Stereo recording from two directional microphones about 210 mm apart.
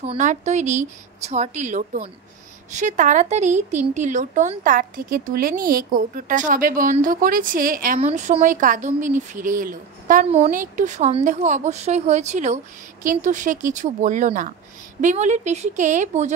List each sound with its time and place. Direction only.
0.0 s speech: 30° right (ahead or behind)